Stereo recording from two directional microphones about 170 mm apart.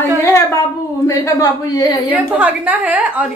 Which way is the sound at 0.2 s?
15° left (ahead or behind).